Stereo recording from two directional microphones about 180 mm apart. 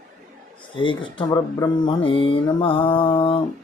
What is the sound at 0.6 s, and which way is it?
Speech, 30° left (ahead or behind).